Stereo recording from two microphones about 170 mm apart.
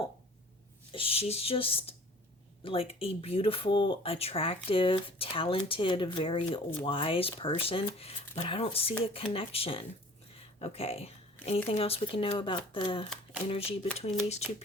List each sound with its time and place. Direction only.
0.9 s speech: 35° left (ahead or behind)
10.3 s a sound: 35° left (ahead or behind)
11.4 s speech: 35° left (ahead or behind)